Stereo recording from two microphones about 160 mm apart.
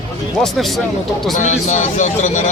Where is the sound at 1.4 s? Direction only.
45° left (ahead or behind).